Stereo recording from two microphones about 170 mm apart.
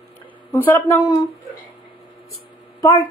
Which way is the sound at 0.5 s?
15° left (ahead or behind).